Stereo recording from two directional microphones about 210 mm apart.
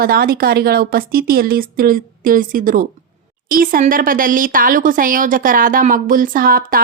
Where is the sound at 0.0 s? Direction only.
45° right (ahead or behind).